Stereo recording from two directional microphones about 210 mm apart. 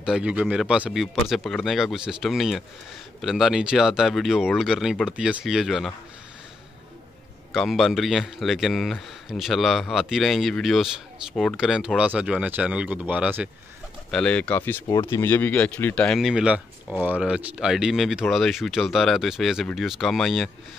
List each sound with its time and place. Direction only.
0.0 s speech: 5° right (ahead or behind)
7.5 s speech: centre (ahead or behind)
14.1 s speech: 5° left (ahead or behind)